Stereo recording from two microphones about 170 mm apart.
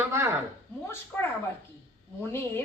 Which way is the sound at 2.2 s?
15° left (ahead or behind).